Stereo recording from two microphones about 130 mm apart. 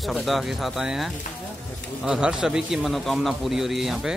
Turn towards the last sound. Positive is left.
turn(degrees=0)  # may be behind; listen again after turning